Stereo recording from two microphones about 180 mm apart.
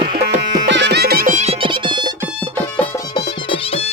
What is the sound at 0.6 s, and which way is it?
Music, 75° right (ahead or behind).